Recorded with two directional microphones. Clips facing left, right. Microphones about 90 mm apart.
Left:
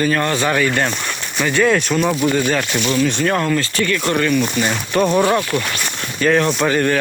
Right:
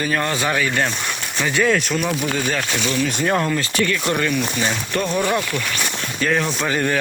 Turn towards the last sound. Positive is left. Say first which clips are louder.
# left 4 dB
turn(degrees=-5)  # may be behind; listen again after turning